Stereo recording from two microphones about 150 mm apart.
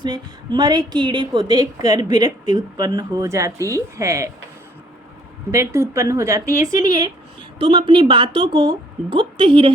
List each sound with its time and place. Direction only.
0.0 s speech: 30° right (ahead or behind)
5.5 s speech: 20° right (ahead or behind)
7.6 s a woman's voice: 35° right (ahead or behind)